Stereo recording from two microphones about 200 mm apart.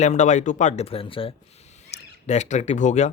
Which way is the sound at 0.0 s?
35° left (ahead or behind).